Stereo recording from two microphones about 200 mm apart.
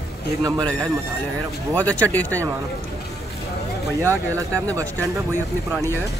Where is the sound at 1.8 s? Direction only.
5° left (ahead or behind).